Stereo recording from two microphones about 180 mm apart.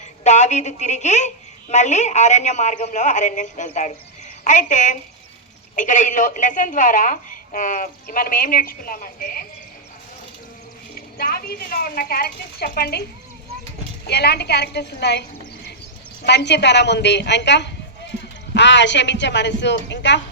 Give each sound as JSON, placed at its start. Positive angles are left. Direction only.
{"t": 0.3, "sound": "a man's voice", "side_deg": 40}
{"t": 10.9, "sound": "speech", "side_deg": 55}
{"t": 16.2, "sound": "a woman's voice", "side_deg": 70}